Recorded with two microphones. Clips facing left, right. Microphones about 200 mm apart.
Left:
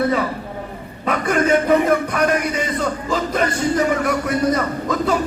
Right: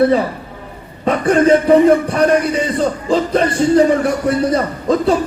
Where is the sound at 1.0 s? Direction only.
30° right (ahead or behind).